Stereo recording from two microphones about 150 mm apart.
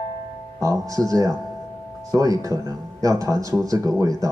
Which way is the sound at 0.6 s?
20° right (ahead or behind).